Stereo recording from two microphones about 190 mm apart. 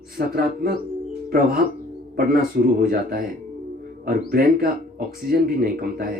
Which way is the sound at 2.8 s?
50° right (ahead or behind).